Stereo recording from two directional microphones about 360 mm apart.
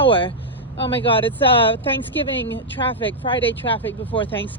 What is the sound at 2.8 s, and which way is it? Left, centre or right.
Speech, centre.